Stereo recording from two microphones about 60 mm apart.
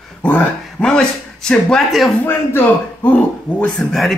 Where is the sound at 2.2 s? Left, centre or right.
Left.